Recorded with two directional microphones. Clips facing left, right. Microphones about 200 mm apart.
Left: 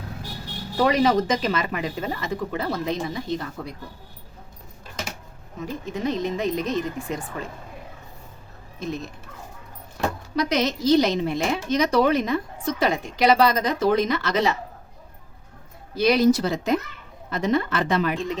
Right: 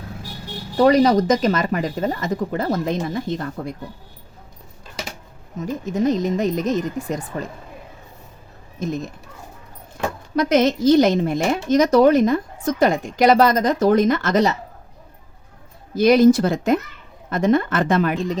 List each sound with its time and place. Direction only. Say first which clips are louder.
0.8 s speech: right 5 dB; 40° right (ahead or behind)
5.6 s speech: right 7 dB; 45° right (ahead or behind)
8.8 s speech: right 5 dB; 45° right (ahead or behind)
10.3 s speech: right 7 dB; 50° right (ahead or behind)
16.0 s speech: right 5 dB; 45° right (ahead or behind)